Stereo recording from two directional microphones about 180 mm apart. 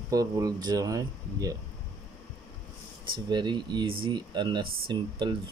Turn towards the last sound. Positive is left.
turn(degrees=-25)  # may be behind; listen again after turning